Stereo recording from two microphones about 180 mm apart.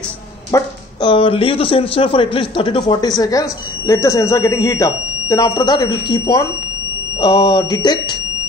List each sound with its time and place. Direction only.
1.0 s speech: 30° left (ahead or behind)